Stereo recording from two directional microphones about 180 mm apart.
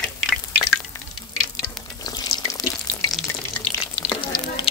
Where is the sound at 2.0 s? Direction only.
25° left (ahead or behind).